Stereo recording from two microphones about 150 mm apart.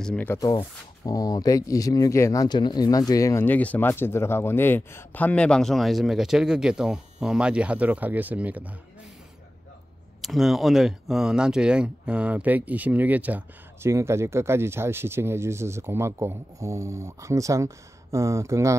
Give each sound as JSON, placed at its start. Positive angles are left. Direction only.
{"t": 0.0, "sound": "speech", "side_deg": 10}
{"t": 0.6, "sound": "speech", "side_deg": 25}
{"t": 10.2, "sound": "speech", "side_deg": 0}